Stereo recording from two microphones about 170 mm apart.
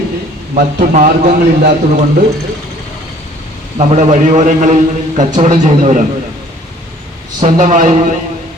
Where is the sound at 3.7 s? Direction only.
45° right (ahead or behind).